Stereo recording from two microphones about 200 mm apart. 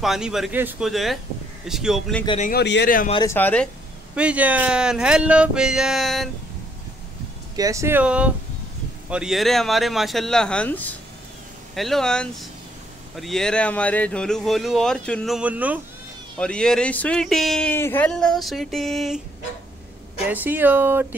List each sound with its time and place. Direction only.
0.0 s speech: centre (ahead or behind)
2.2 s speech: 35° left (ahead or behind)
2.5 s speech: 55° left (ahead or behind)
3.3 s speech: 10° left (ahead or behind)
4.1 s speech: 5° right (ahead or behind)
7.5 s speech: 15° right (ahead or behind)
16.3 s speech: 5° left (ahead or behind)
20.2 s speech: 10° right (ahead or behind)